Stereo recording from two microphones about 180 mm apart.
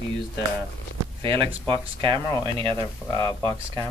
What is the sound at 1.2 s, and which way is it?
Speech, 30° right (ahead or behind).